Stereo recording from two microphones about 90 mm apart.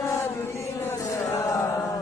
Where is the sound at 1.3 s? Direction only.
40° left (ahead or behind).